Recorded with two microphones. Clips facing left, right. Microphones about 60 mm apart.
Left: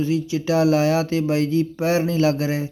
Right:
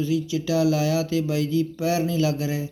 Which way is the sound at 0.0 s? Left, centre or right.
Left.